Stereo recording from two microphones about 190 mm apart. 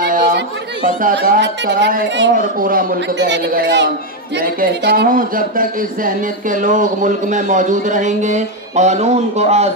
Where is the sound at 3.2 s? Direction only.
65° right (ahead or behind).